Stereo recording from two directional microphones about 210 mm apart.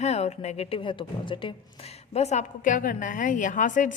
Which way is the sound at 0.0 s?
30° left (ahead or behind).